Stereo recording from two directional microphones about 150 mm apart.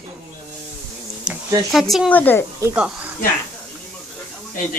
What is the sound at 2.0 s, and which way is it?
Speech, 10° left (ahead or behind).